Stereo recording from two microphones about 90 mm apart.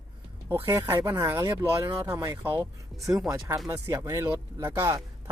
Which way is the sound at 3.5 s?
40° right (ahead or behind).